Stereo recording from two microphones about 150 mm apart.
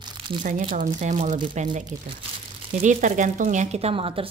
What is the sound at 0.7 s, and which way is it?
Speech, 55° right (ahead or behind).